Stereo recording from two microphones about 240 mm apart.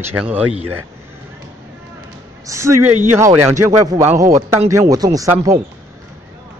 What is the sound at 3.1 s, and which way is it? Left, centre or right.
Speech, centre.